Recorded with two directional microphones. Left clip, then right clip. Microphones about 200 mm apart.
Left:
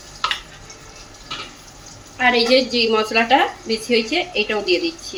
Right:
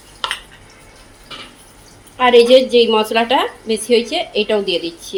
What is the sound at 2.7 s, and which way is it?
A woman's voice, 30° right (ahead or behind).